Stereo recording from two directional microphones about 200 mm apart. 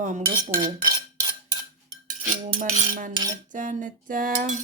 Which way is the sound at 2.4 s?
40° right (ahead or behind).